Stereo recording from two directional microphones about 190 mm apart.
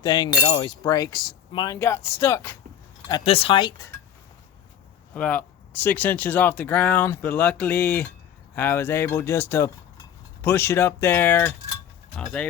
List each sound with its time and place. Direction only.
0.0 s speech: 20° left (ahead or behind)
3.1 s speech: 25° left (ahead or behind)
5.1 s speech: 10° left (ahead or behind)